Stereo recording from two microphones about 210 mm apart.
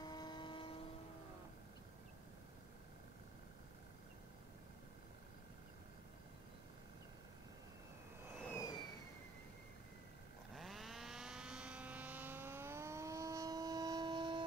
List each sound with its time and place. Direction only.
0.0 s vehicle: 20° left (ahead or behind)
8.5 s vehicle: 20° left (ahead or behind)
10.5 s vehicle: centre (ahead or behind); by 14.4 s 20° right (ahead or behind)